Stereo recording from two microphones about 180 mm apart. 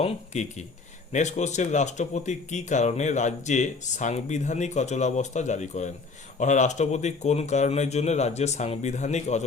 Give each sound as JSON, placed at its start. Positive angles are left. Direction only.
{"t": 0.0, "sound": "speech", "side_deg": 40}